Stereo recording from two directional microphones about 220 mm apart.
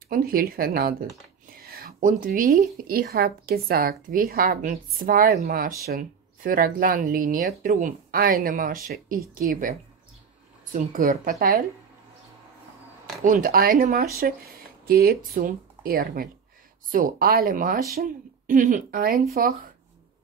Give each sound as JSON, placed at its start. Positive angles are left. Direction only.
{"t": 0.1, "sound": "speech", "side_deg": -40}
{"t": 13.2, "sound": "speech", "side_deg": -40}